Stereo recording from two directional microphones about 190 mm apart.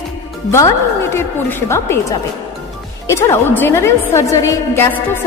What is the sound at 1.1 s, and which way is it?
A woman's voice, 15° left (ahead or behind).